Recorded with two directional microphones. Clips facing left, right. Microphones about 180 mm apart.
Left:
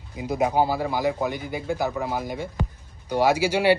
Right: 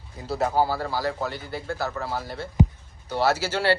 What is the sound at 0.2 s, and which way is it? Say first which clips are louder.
Speech: left 2 dB; 15° left (ahead or behind).